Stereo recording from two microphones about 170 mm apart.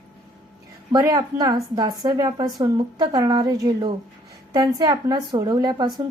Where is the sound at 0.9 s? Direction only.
20° right (ahead or behind).